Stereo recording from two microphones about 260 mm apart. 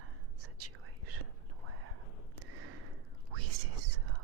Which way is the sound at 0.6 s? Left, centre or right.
Right.